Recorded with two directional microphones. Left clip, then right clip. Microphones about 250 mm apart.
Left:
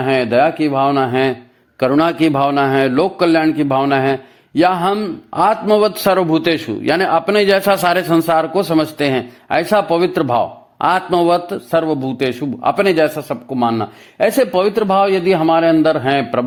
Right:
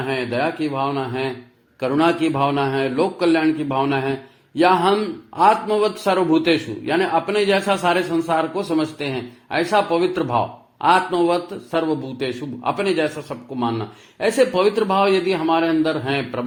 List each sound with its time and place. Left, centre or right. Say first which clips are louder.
0.0 s a man's voice: left 9 dB; left